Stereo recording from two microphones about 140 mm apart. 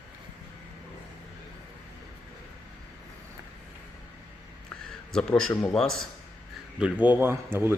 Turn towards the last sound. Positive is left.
turn(degrees=-15)  # may be behind; listen again after turning